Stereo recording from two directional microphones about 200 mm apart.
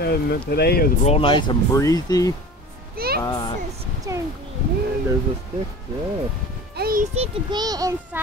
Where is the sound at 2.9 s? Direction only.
50° right (ahead or behind).